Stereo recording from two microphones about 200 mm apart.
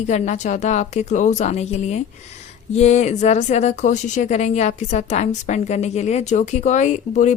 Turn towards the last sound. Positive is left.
turn(degrees=35)  # may be behind; listen again after turning